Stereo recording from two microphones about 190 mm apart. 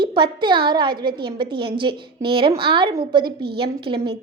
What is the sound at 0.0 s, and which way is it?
A child's voice, 25° right (ahead or behind).